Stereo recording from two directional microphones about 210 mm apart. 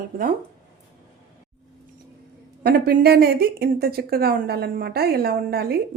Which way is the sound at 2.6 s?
45° right (ahead or behind).